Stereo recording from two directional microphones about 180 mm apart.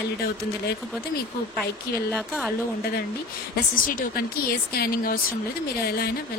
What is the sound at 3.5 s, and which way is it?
Speech, 55° left (ahead or behind).